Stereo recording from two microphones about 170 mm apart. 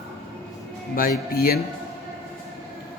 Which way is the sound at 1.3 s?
60° left (ahead or behind).